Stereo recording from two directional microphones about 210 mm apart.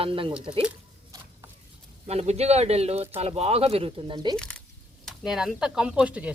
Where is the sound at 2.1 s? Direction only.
30° right (ahead or behind).